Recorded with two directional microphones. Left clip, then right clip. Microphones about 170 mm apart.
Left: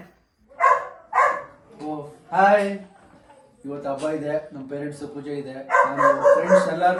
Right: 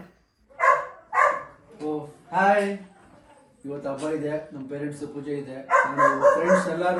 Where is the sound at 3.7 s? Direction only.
Centre (ahead or behind).